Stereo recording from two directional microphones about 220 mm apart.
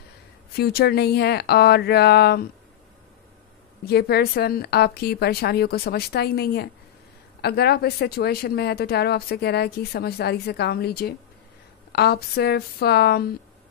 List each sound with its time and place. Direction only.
0.6 s speech: 45° left (ahead or behind)
3.8 s speech: 45° left (ahead or behind)